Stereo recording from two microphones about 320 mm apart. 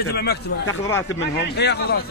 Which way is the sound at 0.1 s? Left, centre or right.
Left.